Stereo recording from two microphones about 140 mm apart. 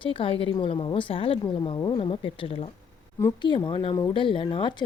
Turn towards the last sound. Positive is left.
turn(degrees=35)  # may be behind; listen again after turning